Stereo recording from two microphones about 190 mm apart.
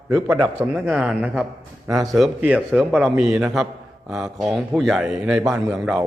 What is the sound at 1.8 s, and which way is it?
Speech, 20° right (ahead or behind).